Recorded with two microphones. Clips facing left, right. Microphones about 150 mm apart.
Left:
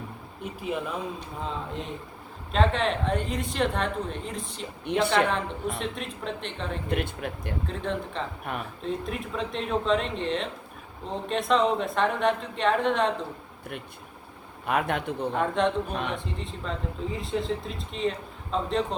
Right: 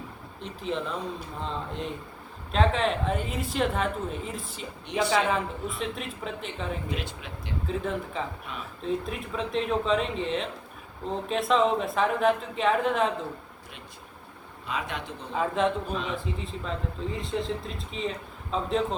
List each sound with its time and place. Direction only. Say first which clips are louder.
0.4 s speech: even; 10° left (ahead or behind)
6.9 s speech: left 6 dB; 55° left (ahead or behind)
7.7 s speech: right 3 dB; 5° right (ahead or behind)
8.5 s speech: left 6 dB; 55° left (ahead or behind)
8.8 s speech: right 4 dB; centre (ahead or behind)
14.7 s speech: left 7 dB; 60° left (ahead or behind)
15.4 s speech: even; centre (ahead or behind)
15.9 s speech: left 1 dB; 60° left (ahead or behind)
16.1 s speech: right 1 dB; centre (ahead or behind)